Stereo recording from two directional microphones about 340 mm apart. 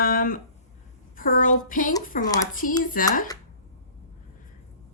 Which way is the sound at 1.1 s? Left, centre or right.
Left.